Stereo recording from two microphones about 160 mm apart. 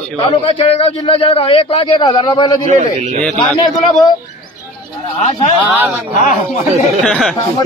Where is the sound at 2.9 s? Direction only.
40° right (ahead or behind).